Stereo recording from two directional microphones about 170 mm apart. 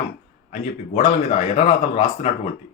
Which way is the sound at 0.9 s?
35° left (ahead or behind).